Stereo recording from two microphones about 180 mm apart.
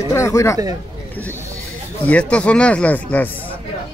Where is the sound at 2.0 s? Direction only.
5° left (ahead or behind).